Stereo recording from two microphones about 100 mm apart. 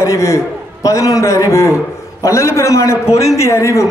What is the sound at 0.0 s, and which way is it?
Speech, 30° left (ahead or behind).